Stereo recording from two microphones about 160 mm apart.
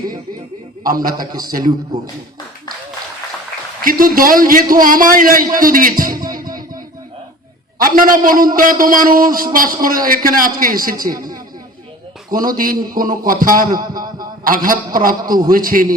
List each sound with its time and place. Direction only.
0.9 s a man's voice: 65° right (ahead or behind)
1.3 s a man's voice: 25° right (ahead or behind)
3.8 s a man's voice: 60° right (ahead or behind)
6.1 s music: 60° right (ahead or behind)
7.8 s a man's voice: 60° right (ahead or behind)
12.3 s a man's voice: 60° right (ahead or behind)
13.9 s a sound: 25° right (ahead or behind)
14.4 s a man's voice: 60° right (ahead or behind)